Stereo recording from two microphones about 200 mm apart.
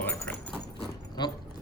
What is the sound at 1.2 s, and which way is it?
Speech, 20° left (ahead or behind).